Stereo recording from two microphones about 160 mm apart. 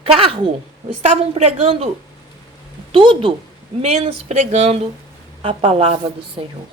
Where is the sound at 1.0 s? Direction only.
45° right (ahead or behind).